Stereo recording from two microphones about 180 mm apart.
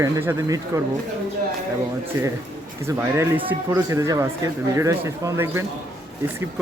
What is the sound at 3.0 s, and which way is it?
Speech, 10° right (ahead or behind).